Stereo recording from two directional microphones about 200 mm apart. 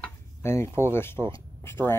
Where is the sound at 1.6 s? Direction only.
10° left (ahead or behind).